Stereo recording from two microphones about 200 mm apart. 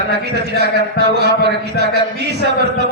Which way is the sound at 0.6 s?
55° right (ahead or behind).